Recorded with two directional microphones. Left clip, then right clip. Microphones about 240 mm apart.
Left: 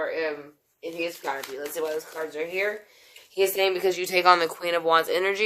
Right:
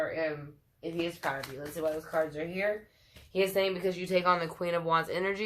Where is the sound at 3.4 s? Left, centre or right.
Left.